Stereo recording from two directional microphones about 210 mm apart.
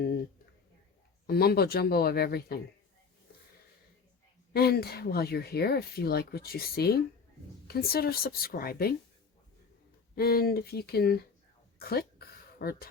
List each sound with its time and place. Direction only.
1.3 s speech: 50° left (ahead or behind)
4.5 s speech: 50° left (ahead or behind)
10.2 s speech: 45° left (ahead or behind)
11.8 s a sound: 45° left (ahead or behind)